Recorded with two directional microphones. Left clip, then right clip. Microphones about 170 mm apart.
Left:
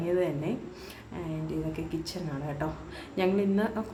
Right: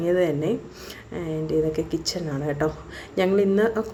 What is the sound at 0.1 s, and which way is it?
A woman's voice, 30° right (ahead or behind).